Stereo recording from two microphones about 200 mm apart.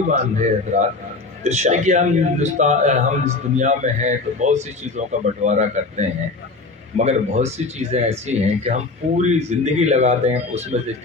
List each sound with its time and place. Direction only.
0.1 s a man's voice: 35° right (ahead or behind)